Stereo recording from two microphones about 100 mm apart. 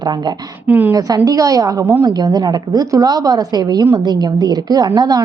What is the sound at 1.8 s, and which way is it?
Speech, 20° right (ahead or behind).